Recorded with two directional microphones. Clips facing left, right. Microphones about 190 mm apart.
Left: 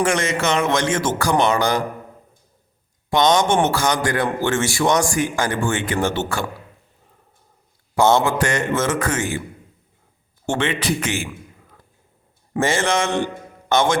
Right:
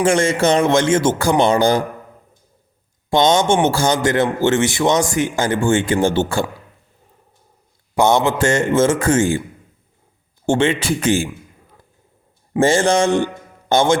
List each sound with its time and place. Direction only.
0.0 s a man's voice: 30° right (ahead or behind)
3.1 s a man's voice: 25° right (ahead or behind)
7.9 s a man's voice: 15° right (ahead or behind)
10.4 s a man's voice: 30° right (ahead or behind)
12.5 s mantra: 30° right (ahead or behind)
13.7 s a man's voice: 30° right (ahead or behind)